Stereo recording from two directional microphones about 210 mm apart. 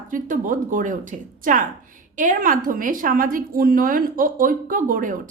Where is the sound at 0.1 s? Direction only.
40° right (ahead or behind).